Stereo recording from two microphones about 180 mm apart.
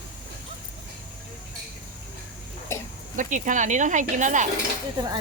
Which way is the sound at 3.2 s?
45° right (ahead or behind).